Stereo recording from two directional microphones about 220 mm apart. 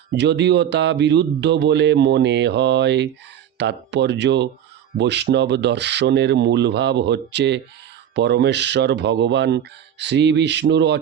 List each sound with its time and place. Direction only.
0.1 s speech: 50° right (ahead or behind)